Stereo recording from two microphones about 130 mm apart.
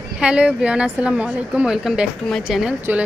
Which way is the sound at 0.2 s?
10° right (ahead or behind).